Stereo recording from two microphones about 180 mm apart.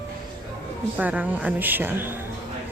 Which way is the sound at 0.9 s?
10° right (ahead or behind).